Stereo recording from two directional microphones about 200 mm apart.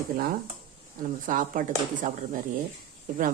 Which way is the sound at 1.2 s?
40° right (ahead or behind).